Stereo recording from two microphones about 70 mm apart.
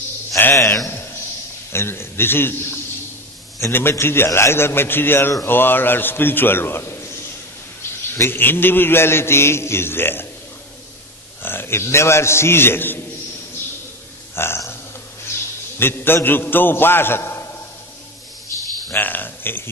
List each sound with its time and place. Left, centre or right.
0.4 s a man's voice: left
3.5 s a man's voice: left
8.2 s a man's voice: left
11.4 s a man's voice: left
14.3 s burping: left
15.8 s a man's voice: left
18.9 s a sound: left